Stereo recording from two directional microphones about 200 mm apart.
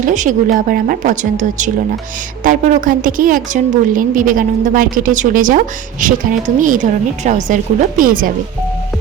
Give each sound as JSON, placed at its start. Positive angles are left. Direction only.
{"t": 0.0, "sound": "a woman's voice", "side_deg": -40}